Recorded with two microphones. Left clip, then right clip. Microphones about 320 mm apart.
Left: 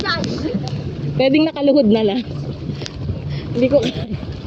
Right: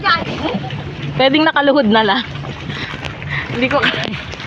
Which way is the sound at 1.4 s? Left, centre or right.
Right.